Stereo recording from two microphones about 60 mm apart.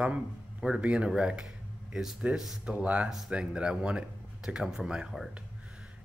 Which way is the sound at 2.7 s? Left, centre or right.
Right.